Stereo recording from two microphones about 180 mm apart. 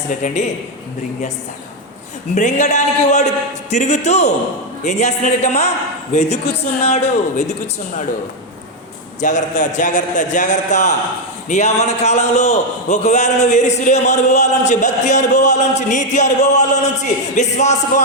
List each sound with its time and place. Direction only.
0.1 s a man's voice: 45° left (ahead or behind)
2.3 s a man's voice: 40° left (ahead or behind)
9.2 s a man's voice: 45° left (ahead or behind)